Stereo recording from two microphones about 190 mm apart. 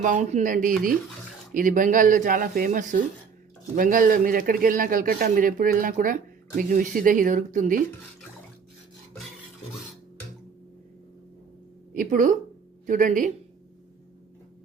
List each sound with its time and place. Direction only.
0.0 s a man's voice: 40° right (ahead or behind)
11.9 s a man's voice: 45° right (ahead or behind)